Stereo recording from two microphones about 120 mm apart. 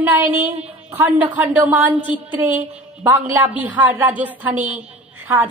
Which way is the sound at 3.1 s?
15° right (ahead or behind).